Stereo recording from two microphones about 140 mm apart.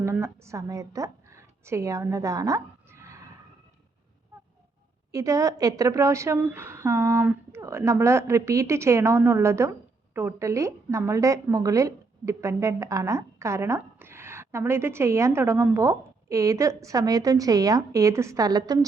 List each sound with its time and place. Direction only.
0.0 s a woman's voice: 20° right (ahead or behind)
5.1 s a woman's voice: 25° right (ahead or behind)